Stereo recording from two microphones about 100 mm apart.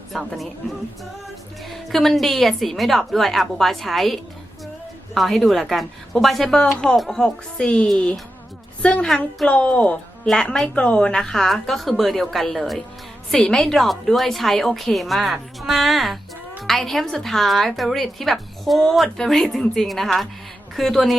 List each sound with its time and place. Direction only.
0.1 s a woman's voice: centre (ahead or behind)
1.6 s a woman's voice: centre (ahead or behind)